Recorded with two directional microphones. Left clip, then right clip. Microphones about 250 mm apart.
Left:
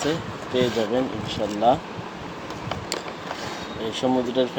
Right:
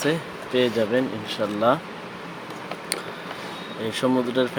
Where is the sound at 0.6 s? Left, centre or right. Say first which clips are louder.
Right 1 dB; right.